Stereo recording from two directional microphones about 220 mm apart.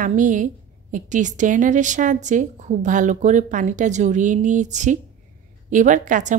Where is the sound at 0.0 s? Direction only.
35° right (ahead or behind).